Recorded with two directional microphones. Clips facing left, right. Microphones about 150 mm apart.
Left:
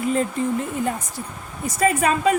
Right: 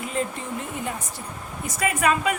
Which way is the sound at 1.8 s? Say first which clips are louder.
Left 3 dB; 35° left (ahead or behind).